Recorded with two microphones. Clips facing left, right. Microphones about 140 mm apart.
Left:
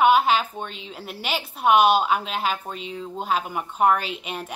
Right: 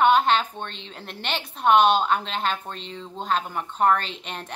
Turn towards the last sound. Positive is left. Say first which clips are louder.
# left 3 dB
turn(degrees=10)  # may be behind; listen again after turning